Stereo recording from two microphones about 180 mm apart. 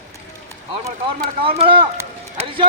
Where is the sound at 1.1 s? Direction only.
30° right (ahead or behind).